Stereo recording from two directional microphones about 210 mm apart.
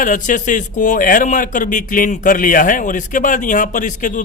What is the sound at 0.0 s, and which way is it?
A man's voice, 40° left (ahead or behind).